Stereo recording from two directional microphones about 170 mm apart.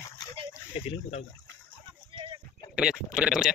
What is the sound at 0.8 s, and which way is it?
Speech, 35° left (ahead or behind).